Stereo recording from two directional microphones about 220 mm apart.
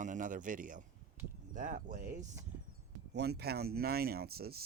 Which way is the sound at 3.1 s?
45° right (ahead or behind).